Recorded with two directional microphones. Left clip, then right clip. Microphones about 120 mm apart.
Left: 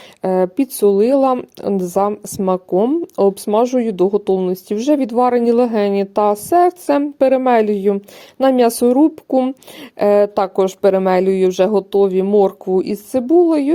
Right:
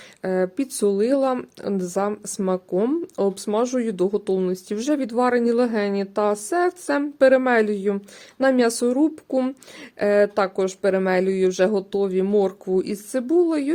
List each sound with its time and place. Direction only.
0.2 s speech: 45° left (ahead or behind)